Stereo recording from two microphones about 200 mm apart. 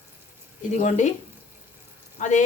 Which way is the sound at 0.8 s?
35° left (ahead or behind).